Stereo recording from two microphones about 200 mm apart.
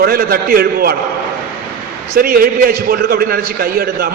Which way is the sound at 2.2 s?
45° right (ahead or behind).